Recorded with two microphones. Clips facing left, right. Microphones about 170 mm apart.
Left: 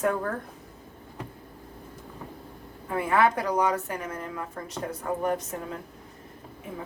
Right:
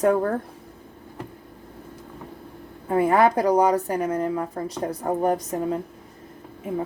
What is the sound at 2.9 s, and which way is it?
Speech, 40° right (ahead or behind).